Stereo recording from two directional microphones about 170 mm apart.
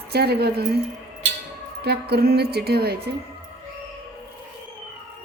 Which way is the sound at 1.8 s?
70° right (ahead or behind).